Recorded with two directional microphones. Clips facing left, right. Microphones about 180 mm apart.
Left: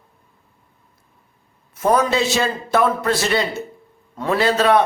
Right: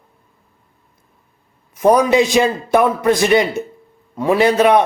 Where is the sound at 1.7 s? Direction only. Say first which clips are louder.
Right 5 dB; 15° right (ahead or behind).